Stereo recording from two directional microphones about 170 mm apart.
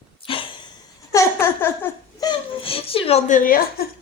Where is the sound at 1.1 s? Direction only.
15° left (ahead or behind).